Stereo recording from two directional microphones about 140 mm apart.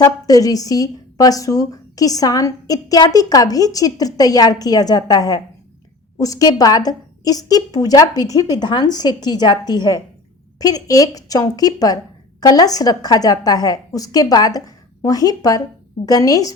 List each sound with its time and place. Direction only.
0.0 s a woman's voice: 25° left (ahead or behind)